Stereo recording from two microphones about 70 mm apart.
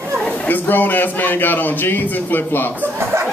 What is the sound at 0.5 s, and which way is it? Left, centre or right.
Speech, left.